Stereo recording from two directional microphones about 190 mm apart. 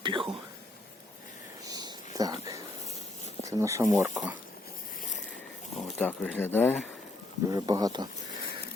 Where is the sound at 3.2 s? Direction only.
35° left (ahead or behind).